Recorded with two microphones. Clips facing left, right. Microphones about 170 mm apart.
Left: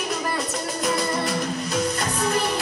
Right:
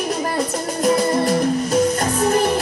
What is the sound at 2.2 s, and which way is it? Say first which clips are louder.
Music: right 7 dB; 45° right (ahead or behind).